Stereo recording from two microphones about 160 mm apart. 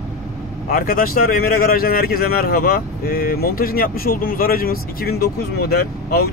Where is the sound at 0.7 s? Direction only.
65° left (ahead or behind).